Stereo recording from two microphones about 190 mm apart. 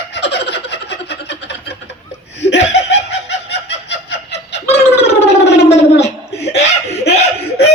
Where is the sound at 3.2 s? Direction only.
65° left (ahead or behind).